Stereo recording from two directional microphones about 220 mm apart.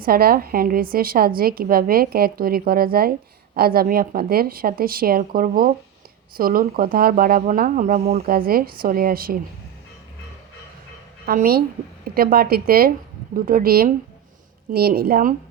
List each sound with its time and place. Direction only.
0.0 s a woman's voice: 40° right (ahead or behind)
11.3 s a woman's voice: 45° right (ahead or behind)